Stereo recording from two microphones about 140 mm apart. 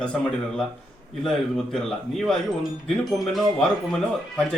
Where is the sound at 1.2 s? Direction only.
5° left (ahead or behind).